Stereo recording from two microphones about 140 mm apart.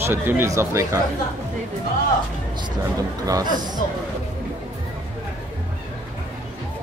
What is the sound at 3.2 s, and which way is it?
Speech, 25° right (ahead or behind).